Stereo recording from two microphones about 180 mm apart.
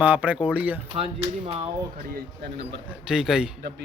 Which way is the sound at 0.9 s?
35° right (ahead or behind).